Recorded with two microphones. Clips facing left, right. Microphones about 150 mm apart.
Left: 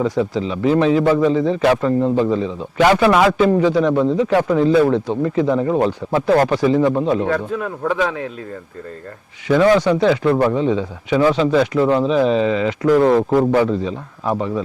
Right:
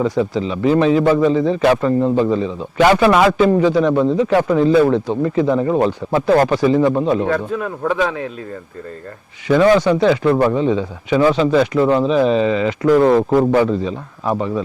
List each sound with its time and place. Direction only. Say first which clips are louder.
0.0 s speech: right 1 dB; 25° right (ahead or behind)
2.0 s speech: right 1 dB; 35° right (ahead or behind)
2.4 s a man's voice: right 1 dB; 20° right (ahead or behind)
3.8 s speech: right 1 dB; 25° right (ahead or behind)
6.8 s speech: right 1 dB; 30° right (ahead or behind)
9.5 s speech: right 1 dB; 25° right (ahead or behind)
11.8 s speech: right 1 dB; 30° right (ahead or behind)
12.0 s speech: right 1 dB; 20° right (ahead or behind)